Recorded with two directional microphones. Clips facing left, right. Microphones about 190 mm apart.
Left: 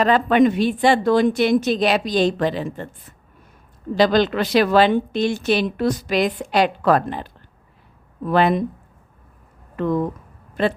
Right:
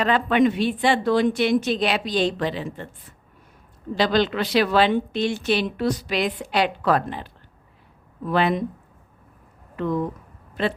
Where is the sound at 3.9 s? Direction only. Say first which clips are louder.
Left 4 dB; 45° left (ahead or behind).